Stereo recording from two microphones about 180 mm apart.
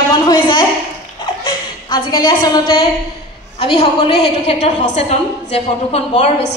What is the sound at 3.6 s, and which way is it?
A woman's voice, 30° left (ahead or behind).